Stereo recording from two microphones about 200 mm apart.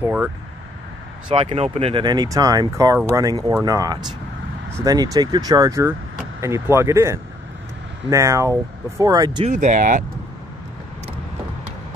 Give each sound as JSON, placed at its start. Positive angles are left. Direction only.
{"t": 0.0, "sound": "vehicle", "side_deg": -5}
{"t": 1.3, "sound": "speech", "side_deg": -30}
{"t": 9.5, "sound": "speech", "side_deg": -40}